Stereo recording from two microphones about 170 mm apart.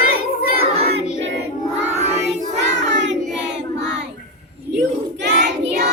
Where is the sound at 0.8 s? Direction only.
80° right.